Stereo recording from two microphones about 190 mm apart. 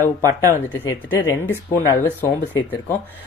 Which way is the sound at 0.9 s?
10° left (ahead or behind).